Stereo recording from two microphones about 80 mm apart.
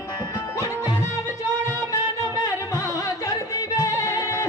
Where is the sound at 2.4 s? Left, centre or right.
Left.